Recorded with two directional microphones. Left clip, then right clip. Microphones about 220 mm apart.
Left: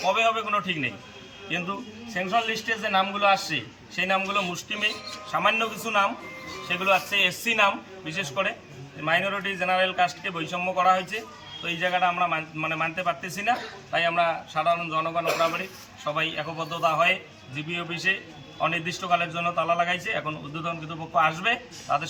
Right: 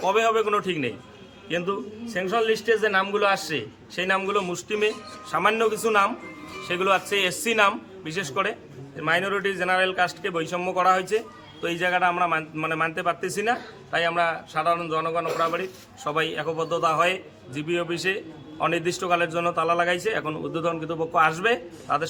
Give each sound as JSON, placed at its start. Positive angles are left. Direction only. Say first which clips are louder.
{"t": 0.0, "sound": "a man's voice", "louder": "right 2 dB", "side_deg": -20}
{"t": 2.1, "sound": "a man's voice", "louder": "right 2 dB", "side_deg": -10}